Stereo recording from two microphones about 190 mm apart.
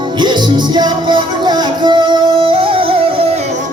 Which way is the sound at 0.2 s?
25° right (ahead or behind).